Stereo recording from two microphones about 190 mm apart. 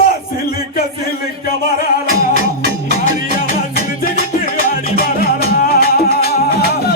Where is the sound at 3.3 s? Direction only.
50° left (ahead or behind).